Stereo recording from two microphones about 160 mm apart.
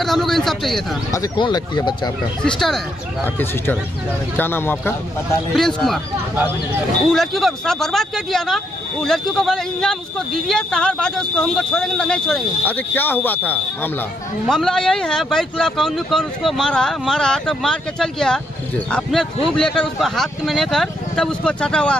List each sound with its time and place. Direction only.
0.0 s speech: centre (ahead or behind)
1.1 s speech: 25° left (ahead or behind)
4.4 s a man's voice: 15° left (ahead or behind)
5.5 s speech: centre (ahead or behind)
6.3 s speech: 10° right (ahead or behind)
7.1 s speech: centre (ahead or behind)